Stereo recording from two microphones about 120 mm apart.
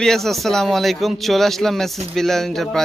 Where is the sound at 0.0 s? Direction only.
5° left (ahead or behind).